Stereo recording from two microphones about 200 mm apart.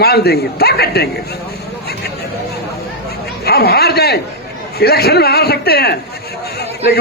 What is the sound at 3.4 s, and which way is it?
A man's voice, 50° left (ahead or behind).